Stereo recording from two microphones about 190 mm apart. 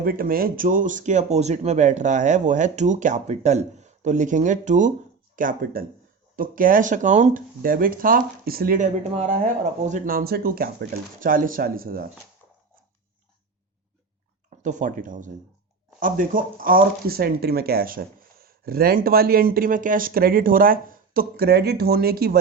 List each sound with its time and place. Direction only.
0.0 s speech: 50° right (ahead or behind)
14.6 s speech: 40° right (ahead or behind)